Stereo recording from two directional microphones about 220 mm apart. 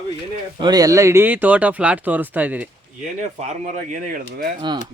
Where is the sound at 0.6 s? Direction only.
15° right (ahead or behind).